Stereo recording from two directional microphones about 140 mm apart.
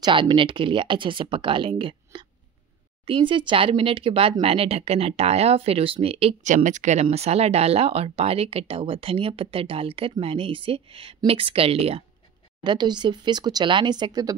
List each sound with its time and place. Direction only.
0.0 s speech: 35° right (ahead or behind)
6.5 s speech: 60° right (ahead or behind); by 12.0 s 45° right (ahead or behind)
12.6 s speech: 30° right (ahead or behind)